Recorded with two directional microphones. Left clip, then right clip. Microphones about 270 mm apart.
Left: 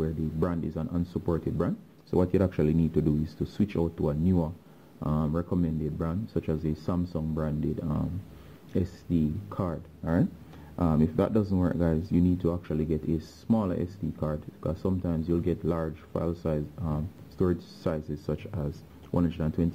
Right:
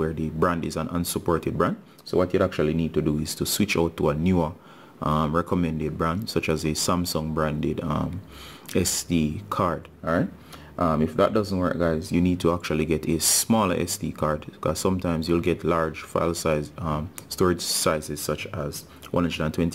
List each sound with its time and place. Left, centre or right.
0.0 s speech: centre
3.7 s speech: centre
10.8 s speech: centre
16.1 s speech: centre